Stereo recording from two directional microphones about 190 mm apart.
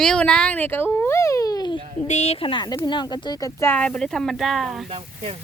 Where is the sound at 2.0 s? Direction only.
35° left (ahead or behind); by 4.9 s centre (ahead or behind).